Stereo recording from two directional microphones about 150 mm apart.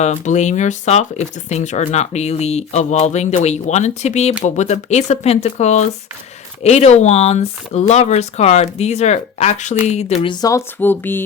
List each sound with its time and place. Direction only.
0.0 s speech: 50° left (ahead or behind)
10.2 s speech: 25° left (ahead or behind)
10.8 s speech: 15° left (ahead or behind)